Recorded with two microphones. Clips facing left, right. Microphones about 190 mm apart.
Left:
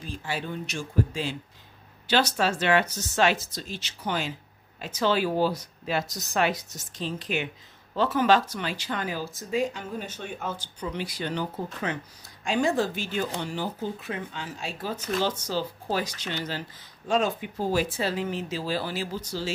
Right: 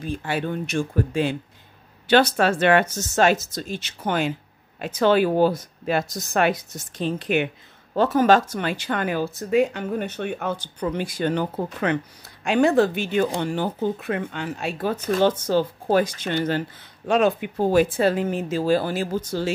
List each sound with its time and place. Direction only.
0.0 s speech: 60° right (ahead or behind)
7.9 s speech: 45° right (ahead or behind)